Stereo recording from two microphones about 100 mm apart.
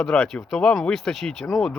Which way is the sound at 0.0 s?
10° left (ahead or behind).